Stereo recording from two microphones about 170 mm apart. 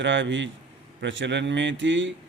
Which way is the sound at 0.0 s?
90° right.